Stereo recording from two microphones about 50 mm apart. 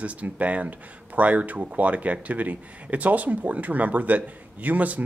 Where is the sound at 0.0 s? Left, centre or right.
Right.